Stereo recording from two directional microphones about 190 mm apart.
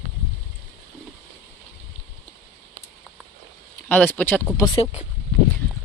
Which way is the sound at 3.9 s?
10° left (ahead or behind).